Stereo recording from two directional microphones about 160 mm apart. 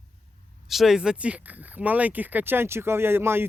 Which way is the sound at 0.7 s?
Centre (ahead or behind).